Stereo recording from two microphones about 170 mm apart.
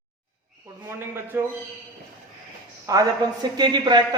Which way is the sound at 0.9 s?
15° right (ahead or behind).